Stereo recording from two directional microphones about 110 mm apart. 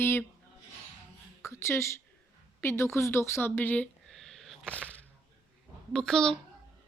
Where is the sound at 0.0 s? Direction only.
20° left (ahead or behind).